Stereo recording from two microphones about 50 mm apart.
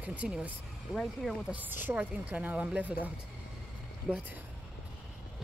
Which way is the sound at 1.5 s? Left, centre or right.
Right.